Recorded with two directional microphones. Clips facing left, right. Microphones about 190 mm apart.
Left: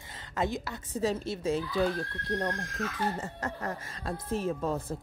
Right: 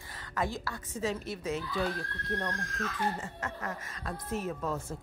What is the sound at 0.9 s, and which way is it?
Speech, 30° left (ahead or behind).